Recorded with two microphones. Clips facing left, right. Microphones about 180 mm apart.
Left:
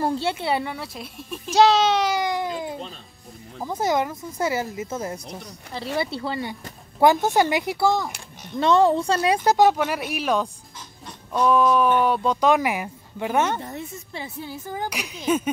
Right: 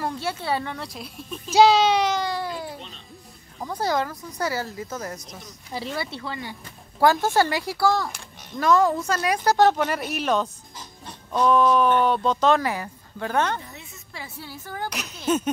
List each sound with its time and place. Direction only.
0.0 s speech: 30° left (ahead or behind)
0.7 s speech: centre (ahead or behind)
2.1 s cat: 15° left (ahead or behind)
3.7 s speech: 20° left (ahead or behind)
7.0 s speech: 20° left (ahead or behind)
9.8 s speech: 5° left (ahead or behind)
13.6 s a woman's voice: 50° left (ahead or behind)
14.1 s speech: 20° left (ahead or behind)